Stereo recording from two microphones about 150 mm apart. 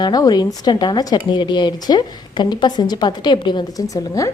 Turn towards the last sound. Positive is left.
turn(degrees=20)  # may be behind; listen again after turning